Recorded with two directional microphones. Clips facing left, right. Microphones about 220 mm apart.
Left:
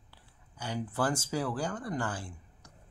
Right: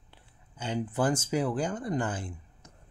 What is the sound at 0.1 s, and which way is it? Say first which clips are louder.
Speech: right 3 dB; 20° right (ahead or behind).